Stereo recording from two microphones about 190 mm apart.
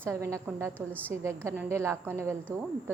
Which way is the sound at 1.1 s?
10° right (ahead or behind).